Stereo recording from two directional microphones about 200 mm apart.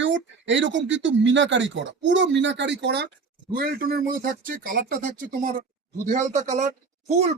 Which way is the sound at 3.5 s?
45° right (ahead or behind).